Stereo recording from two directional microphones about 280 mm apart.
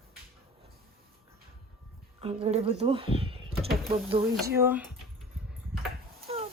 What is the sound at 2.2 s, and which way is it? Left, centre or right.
Speech, right.